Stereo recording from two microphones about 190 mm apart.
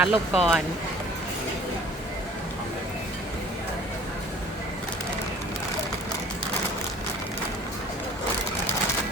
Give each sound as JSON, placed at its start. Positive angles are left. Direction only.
{"t": 0.0, "sound": "speech", "side_deg": -5}